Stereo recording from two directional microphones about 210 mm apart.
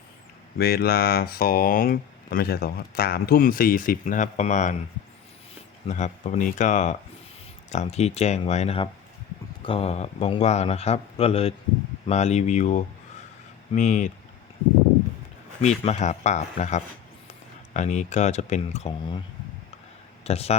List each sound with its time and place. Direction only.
0.6 s speech: 50° left (ahead or behind)
5.8 s a man's voice: 35° left (ahead or behind)
15.8 s speech: 30° left (ahead or behind)
20.2 s a man's voice: 30° left (ahead or behind)